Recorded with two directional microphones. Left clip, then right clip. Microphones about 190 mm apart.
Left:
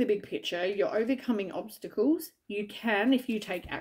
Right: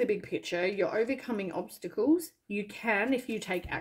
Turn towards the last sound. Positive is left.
turn(degrees=25)  # may be behind; listen again after turning